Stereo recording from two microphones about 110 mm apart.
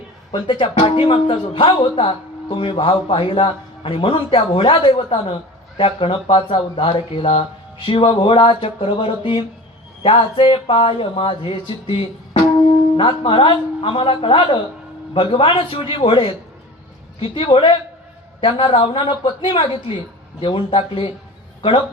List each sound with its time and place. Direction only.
0.6 s a man's voice: 55° left (ahead or behind)